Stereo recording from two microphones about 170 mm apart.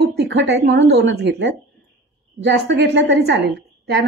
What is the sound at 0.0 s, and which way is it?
A woman's voice, 80° right.